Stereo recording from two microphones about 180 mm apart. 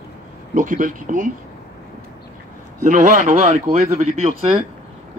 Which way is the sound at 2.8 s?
45° right (ahead or behind).